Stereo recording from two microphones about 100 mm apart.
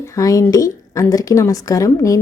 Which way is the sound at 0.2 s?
35° left (ahead or behind).